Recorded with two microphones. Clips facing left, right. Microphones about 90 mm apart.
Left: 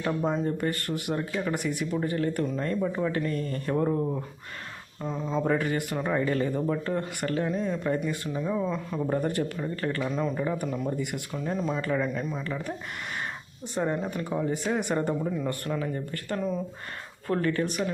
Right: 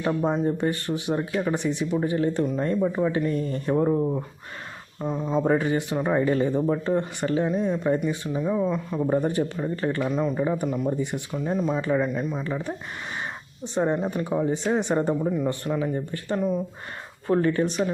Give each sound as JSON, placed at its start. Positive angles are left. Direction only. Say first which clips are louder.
{"t": 0.0, "sound": "speech", "louder": "right 4 dB", "side_deg": -20}
{"t": 1.5, "sound": "speech", "louder": "right 4 dB", "side_deg": -25}
{"t": 5.5, "sound": "speech", "louder": "right 4 dB", "side_deg": -25}
{"t": 10.1, "sound": "speech", "louder": "right 4 dB", "side_deg": -5}
{"t": 10.3, "sound": "speech", "louder": "right 4 dB", "side_deg": -15}
{"t": 11.8, "sound": "speech", "louder": "right 4 dB", "side_deg": -20}
{"t": 12.0, "sound": "speech", "louder": "right 3 dB", "side_deg": -5}
{"t": 12.4, "sound": "speech", "louder": "right 4 dB", "side_deg": -20}
{"t": 13.7, "sound": "speech", "louder": "right 4 dB", "side_deg": -25}